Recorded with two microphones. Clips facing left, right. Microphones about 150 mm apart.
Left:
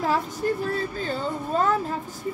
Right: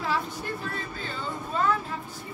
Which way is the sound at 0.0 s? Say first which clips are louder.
Left 6 dB; 40° left (ahead or behind).